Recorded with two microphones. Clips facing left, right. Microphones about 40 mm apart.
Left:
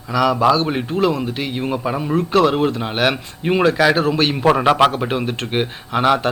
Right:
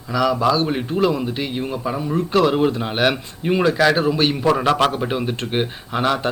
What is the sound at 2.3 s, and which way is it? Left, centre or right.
Speech, centre.